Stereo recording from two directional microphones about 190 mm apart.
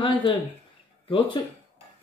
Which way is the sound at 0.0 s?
25° left (ahead or behind).